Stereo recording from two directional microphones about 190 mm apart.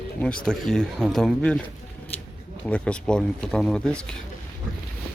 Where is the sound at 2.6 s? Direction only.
5° left (ahead or behind).